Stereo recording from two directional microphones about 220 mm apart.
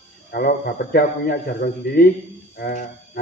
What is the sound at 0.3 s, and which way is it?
A man's voice, 45° left (ahead or behind).